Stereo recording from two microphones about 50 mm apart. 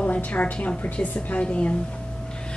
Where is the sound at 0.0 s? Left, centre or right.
Left.